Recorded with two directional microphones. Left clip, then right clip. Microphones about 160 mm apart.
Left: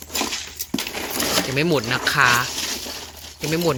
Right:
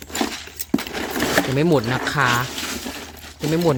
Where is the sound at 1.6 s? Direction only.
25° right (ahead or behind).